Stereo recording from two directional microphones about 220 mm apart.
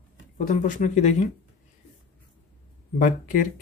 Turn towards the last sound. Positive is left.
turn(degrees=35)  # may be behind; listen again after turning